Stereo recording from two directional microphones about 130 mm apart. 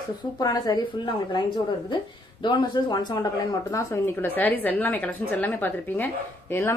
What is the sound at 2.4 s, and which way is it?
Speech, 35° left (ahead or behind).